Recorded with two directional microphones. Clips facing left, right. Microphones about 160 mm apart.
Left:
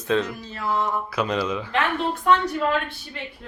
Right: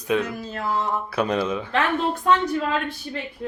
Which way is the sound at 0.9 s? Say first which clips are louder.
Right 1 dB; 30° right (ahead or behind).